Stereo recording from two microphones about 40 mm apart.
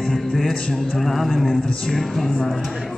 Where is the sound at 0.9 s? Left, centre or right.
Centre.